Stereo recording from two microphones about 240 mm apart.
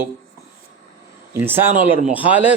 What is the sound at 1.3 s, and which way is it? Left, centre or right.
A man's voice, centre.